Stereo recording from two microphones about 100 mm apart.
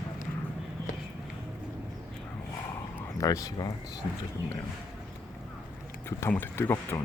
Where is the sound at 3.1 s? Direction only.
35° left (ahead or behind).